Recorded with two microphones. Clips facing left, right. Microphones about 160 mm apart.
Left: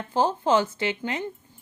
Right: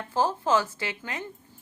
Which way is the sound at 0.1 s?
20° left (ahead or behind).